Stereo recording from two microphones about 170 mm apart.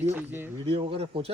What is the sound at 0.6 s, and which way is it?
Speech, 35° right (ahead or behind).